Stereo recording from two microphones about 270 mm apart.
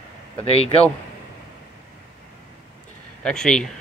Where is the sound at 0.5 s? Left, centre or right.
Left.